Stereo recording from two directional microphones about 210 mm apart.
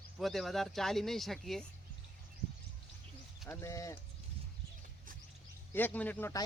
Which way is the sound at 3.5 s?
15° left (ahead or behind).